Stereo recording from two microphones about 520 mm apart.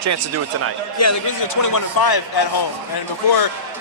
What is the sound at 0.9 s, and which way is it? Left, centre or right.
A man's voice, left.